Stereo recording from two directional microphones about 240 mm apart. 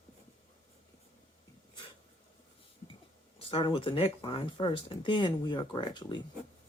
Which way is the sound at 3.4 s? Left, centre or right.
Left.